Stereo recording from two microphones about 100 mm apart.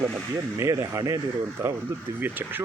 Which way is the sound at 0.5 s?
30° right (ahead or behind).